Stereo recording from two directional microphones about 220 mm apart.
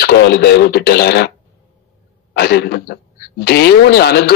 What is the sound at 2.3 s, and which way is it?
Speech, 45° left (ahead or behind).